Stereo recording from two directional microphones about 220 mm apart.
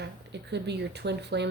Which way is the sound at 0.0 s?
50° right (ahead or behind).